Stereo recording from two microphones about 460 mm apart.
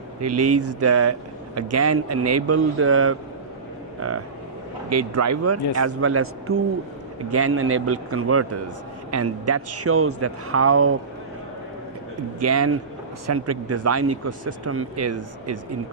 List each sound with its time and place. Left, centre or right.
0.3 s speech: right
4.9 s a man's voice: right
12.4 s speech: right